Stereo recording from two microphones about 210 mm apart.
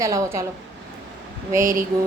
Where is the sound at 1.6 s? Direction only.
40° right (ahead or behind).